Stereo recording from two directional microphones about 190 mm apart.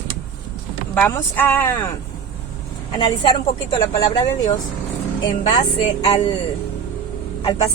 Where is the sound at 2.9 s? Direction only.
20° left (ahead or behind).